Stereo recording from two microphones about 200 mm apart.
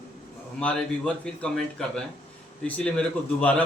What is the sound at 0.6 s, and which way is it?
A man's voice, 5° left (ahead or behind).